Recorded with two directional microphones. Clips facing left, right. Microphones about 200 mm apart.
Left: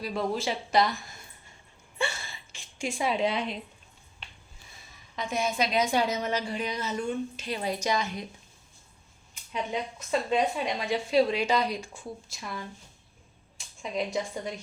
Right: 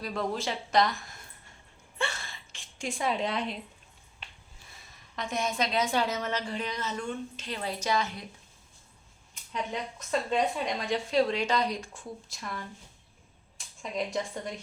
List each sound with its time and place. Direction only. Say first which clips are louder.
0.0 s speech: left 2 dB; 5° left (ahead or behind)
2.0 s a sound: left 2 dB; 5° left (ahead or behind)
5.1 s a woman's voice: left 2 dB; centre (ahead or behind)
9.3 s speech: left 3 dB; 5° left (ahead or behind)